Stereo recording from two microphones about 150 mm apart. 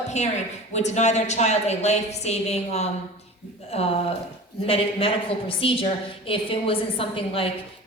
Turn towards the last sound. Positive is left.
turn(degrees=35)  # may be behind; listen again after turning